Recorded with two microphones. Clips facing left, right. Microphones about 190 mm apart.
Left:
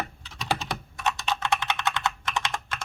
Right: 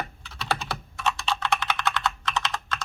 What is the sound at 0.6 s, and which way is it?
Computer keyboard, 15° left (ahead or behind).